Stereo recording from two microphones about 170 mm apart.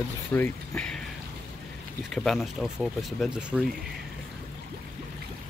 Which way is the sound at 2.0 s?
Centre (ahead or behind).